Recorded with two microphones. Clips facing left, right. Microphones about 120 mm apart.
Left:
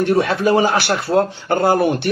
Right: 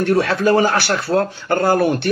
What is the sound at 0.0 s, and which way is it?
Speech, 15° left (ahead or behind).